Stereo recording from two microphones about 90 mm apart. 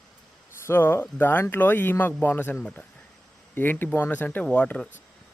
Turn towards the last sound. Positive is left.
turn(degrees=15)  # may be behind; listen again after turning